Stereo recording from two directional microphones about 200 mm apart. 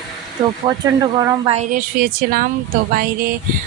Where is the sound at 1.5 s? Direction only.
45° right (ahead or behind).